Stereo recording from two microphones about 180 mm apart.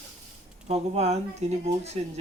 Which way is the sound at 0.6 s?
35° right (ahead or behind).